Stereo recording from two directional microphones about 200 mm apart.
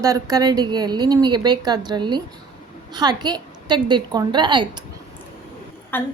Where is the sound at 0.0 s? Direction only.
15° right (ahead or behind).